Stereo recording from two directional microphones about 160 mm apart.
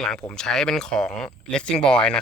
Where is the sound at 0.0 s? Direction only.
5° left (ahead or behind).